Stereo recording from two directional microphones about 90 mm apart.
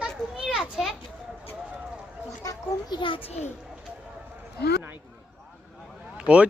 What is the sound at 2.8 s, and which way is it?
Speech, 60° left (ahead or behind).